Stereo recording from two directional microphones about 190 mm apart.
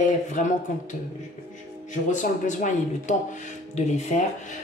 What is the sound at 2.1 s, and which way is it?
A woman's voice, 40° left (ahead or behind).